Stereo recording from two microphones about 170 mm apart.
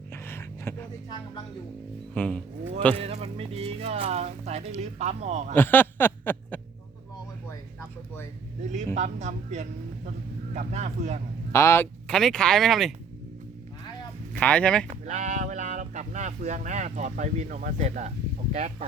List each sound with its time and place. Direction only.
0.1 s a sound: 15° left (ahead or behind)
2.1 s a man's voice: 5° left (ahead or behind)
3.0 s speech: 40° right (ahead or behind)
5.5 s a sound: 10° left (ahead or behind)
9.0 s a man's voice: 45° right (ahead or behind)
11.5 s a man's voice: 15° left (ahead or behind)
12.0 s speech: 5° left (ahead or behind)
14.3 s speech: 5° left (ahead or behind)
15.0 s speech: 45° right (ahead or behind)